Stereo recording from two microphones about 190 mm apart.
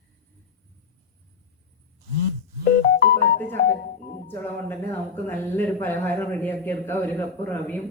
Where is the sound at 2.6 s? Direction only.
55° left (ahead or behind).